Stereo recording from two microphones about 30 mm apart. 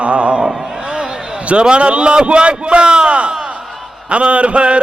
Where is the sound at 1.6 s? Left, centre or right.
Right.